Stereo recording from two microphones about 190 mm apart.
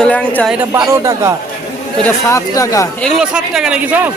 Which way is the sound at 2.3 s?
15° left (ahead or behind).